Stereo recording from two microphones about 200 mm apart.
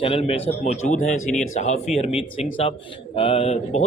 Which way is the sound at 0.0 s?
30° left (ahead or behind).